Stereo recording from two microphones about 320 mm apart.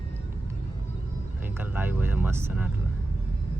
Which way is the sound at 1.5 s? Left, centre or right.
Centre.